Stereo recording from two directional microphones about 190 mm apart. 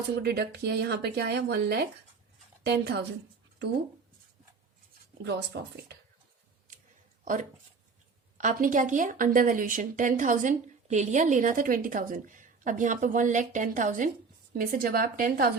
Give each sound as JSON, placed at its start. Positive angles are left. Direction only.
{"t": 0.2, "sound": "speech", "side_deg": -60}
{"t": 5.2, "sound": "speech", "side_deg": -60}
{"t": 8.4, "sound": "speech", "side_deg": -45}